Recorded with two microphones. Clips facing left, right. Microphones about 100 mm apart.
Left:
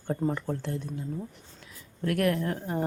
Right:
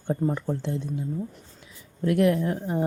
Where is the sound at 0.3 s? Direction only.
15° right (ahead or behind).